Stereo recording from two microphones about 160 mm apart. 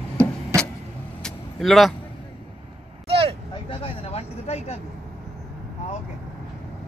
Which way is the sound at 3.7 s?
35° left (ahead or behind).